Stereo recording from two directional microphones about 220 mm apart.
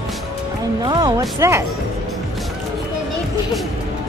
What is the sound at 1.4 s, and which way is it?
Speech, 10° right (ahead or behind).